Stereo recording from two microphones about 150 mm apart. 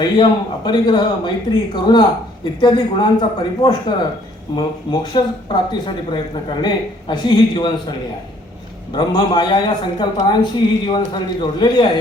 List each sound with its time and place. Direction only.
0.0 s speech: 30° left (ahead or behind)